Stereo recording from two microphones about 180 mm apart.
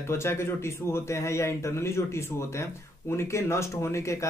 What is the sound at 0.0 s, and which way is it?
Speech, 15° left (ahead or behind).